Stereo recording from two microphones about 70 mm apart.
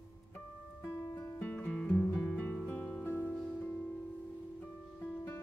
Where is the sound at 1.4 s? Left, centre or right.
Centre; by 3.3 s left.